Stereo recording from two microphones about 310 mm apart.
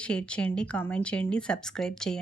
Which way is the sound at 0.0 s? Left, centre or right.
Centre.